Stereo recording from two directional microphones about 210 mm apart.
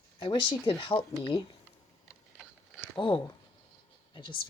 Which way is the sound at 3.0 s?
25° left (ahead or behind).